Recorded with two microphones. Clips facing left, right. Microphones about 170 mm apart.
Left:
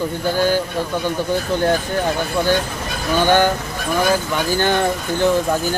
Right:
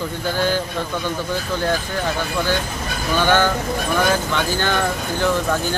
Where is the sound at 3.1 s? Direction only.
15° left (ahead or behind).